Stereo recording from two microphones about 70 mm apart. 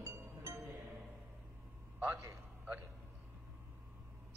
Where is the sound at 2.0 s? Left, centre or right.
Right.